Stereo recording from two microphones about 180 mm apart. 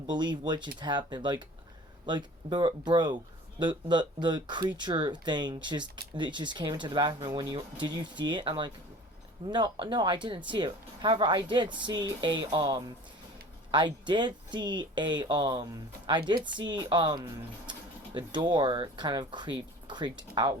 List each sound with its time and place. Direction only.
0.1 s speech: 25° right (ahead or behind)